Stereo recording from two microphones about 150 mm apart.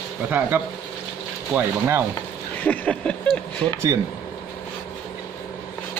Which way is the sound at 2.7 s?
10° left (ahead or behind).